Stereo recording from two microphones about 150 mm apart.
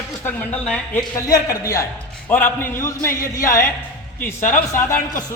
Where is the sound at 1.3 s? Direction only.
20° left (ahead or behind).